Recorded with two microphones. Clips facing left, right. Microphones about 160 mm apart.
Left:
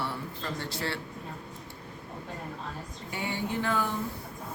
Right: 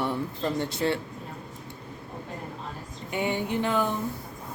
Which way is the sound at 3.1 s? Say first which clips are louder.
Right 5 dB; 20° right (ahead or behind).